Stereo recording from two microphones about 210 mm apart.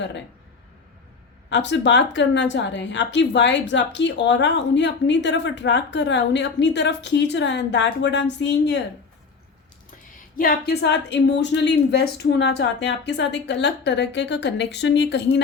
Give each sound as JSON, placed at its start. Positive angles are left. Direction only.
{"t": 1.5, "sound": "a woman's voice", "side_deg": 55}
{"t": 10.3, "sound": "a woman's voice", "side_deg": 45}